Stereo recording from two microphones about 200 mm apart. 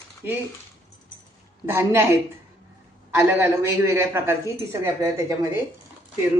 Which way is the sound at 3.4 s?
10° right (ahead or behind).